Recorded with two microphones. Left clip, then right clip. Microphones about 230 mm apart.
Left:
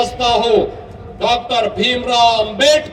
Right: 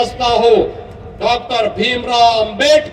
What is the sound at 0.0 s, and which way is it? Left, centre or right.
A man's voice, left.